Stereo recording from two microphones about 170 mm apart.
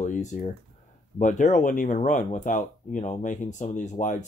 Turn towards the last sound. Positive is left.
turn(degrees=45)  # may be behind; listen again after turning